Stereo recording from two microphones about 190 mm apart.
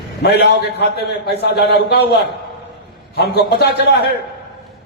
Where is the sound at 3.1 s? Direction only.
55° left (ahead or behind).